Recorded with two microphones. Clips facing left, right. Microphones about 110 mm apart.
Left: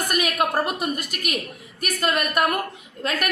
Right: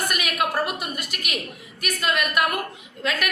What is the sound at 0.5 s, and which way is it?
A woman's voice, 40° left (ahead or behind).